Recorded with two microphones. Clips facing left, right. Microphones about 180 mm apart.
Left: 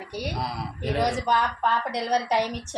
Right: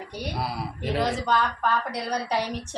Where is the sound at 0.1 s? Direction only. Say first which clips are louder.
Left 3 dB; 10° left (ahead or behind).